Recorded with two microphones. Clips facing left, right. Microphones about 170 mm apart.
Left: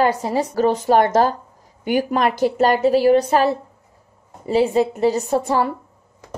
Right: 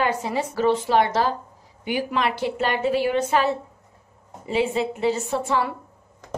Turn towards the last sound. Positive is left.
turn(degrees=40)  # may be behind; listen again after turning